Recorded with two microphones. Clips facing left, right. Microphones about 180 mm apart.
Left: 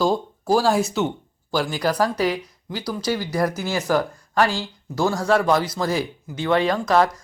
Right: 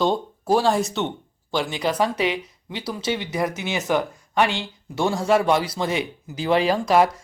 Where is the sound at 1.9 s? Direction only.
25° right (ahead or behind).